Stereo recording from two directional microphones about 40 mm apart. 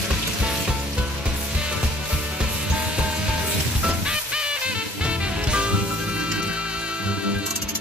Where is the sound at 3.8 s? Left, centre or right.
Right.